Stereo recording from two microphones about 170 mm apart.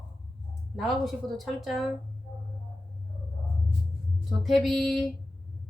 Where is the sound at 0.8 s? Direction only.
Centre (ahead or behind).